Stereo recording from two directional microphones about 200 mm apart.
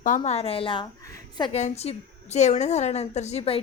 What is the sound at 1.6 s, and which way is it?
A woman's voice, 35° left (ahead or behind).